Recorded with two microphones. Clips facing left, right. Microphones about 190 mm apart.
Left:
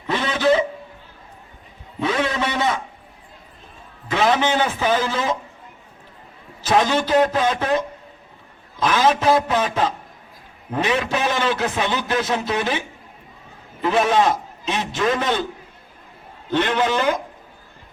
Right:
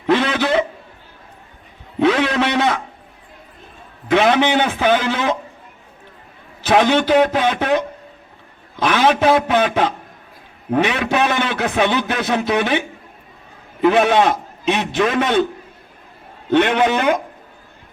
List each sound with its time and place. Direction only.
0.1 s a sound: 70° right (ahead or behind)
2.0 s a sound: 75° right (ahead or behind)
4.1 s a man's voice: 70° right (ahead or behind)
6.6 s a man's voice: 65° right (ahead or behind)
13.8 s a man's voice: 65° right (ahead or behind)
16.5 s a man's voice: 65° right (ahead or behind)